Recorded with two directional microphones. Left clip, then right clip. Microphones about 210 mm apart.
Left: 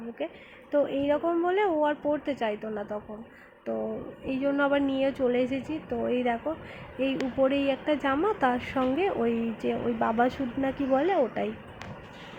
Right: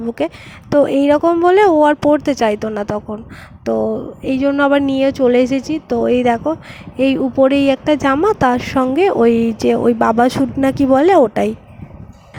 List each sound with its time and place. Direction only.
0.7 s speech: 55° right (ahead or behind)
4.3 s speech: 50° right (ahead or behind)